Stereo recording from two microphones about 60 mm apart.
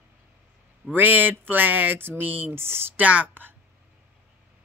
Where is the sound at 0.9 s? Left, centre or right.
Right.